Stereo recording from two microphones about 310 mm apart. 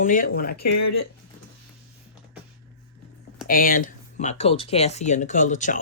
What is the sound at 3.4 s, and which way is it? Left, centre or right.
Speech, left.